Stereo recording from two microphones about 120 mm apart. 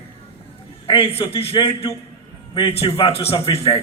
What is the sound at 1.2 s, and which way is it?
A man's voice, 50° left (ahead or behind).